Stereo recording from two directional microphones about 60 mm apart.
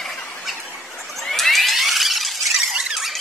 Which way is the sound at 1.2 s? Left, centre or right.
Centre.